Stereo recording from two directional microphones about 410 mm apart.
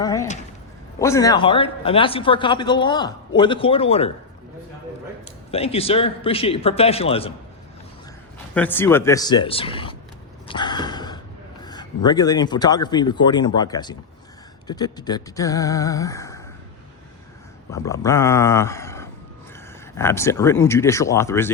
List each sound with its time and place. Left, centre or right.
0.0 s a man's voice: centre
5.5 s a man's voice: centre
8.5 s a man's voice: centre
10.5 s a sound: centre
11.6 s a man's voice: centre
17.7 s a man's voice: centre